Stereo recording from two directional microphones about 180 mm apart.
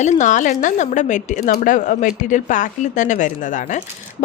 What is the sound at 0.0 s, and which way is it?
A woman's voice, 40° left (ahead or behind).